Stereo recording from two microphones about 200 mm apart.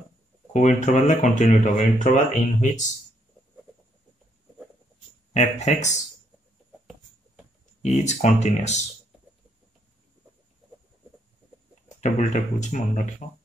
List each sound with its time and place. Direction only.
0.5 s speech: 35° left (ahead or behind)
5.3 s speech: 35° left (ahead or behind)
7.8 s speech: 35° left (ahead or behind)
12.0 s speech: 35° left (ahead or behind)